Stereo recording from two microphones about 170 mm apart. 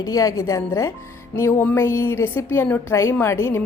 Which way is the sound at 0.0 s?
20° left (ahead or behind).